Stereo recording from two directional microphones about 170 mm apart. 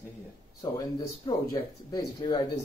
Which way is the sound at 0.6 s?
25° left (ahead or behind).